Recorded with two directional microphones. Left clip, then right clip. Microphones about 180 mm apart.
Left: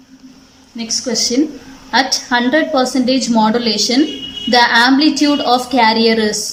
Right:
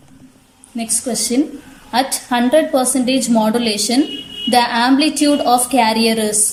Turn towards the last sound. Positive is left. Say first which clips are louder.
# left 3 dB
turn(degrees=-10)  # may be behind; listen again after turning